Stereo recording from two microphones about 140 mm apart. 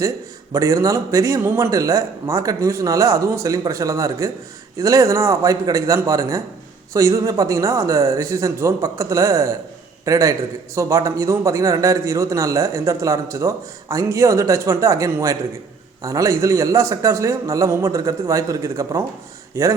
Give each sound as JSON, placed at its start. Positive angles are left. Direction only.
{"t": 0.5, "sound": "a man's voice", "side_deg": -25}